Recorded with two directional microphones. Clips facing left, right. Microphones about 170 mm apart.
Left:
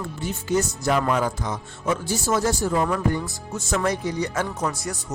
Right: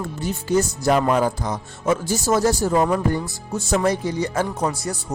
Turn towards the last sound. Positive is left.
turn(degrees=-30)  # may be behind; listen again after turning